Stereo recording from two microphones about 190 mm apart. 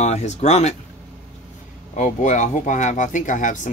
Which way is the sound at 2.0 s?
40° left (ahead or behind).